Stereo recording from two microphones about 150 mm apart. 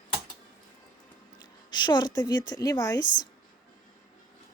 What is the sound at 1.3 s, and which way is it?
A woman's voice, 30° left (ahead or behind).